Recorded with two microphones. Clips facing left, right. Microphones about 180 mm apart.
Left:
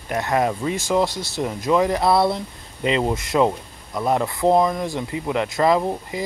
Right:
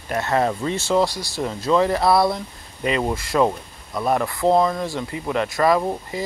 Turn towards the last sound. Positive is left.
turn(degrees=15)  # may be behind; listen again after turning